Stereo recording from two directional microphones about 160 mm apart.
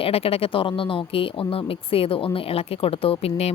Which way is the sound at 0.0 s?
40° left (ahead or behind).